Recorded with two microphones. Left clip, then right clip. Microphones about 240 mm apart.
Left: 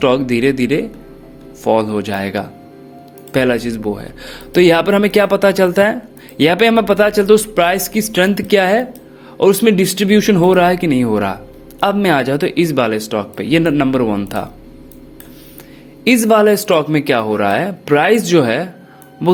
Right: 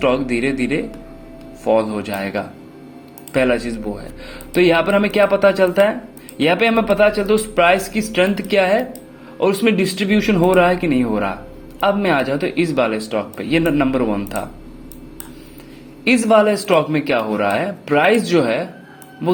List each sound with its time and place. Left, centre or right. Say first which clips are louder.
0.0 s a man's voice: left 4 dB; left
16.0 s a man's voice: left 3 dB; left